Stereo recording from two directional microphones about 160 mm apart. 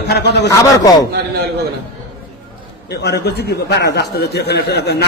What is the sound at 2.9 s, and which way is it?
A man's voice, 90° left.